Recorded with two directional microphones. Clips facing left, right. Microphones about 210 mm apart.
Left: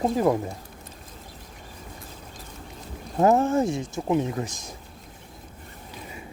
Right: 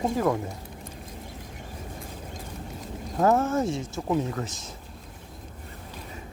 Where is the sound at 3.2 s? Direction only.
15° left (ahead or behind).